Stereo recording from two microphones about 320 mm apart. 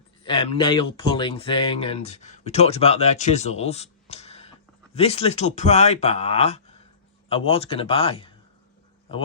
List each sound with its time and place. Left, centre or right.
0.3 s speech: centre